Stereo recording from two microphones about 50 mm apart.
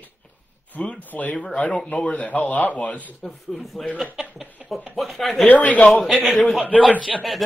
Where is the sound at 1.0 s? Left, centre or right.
Left.